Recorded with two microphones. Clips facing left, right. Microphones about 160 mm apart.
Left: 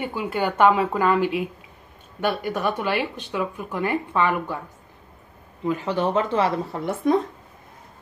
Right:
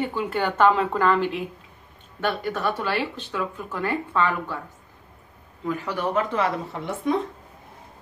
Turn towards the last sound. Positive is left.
turn(degrees=30)  # may be behind; listen again after turning